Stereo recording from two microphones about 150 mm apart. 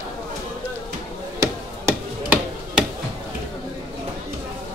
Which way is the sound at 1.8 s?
10° right (ahead or behind).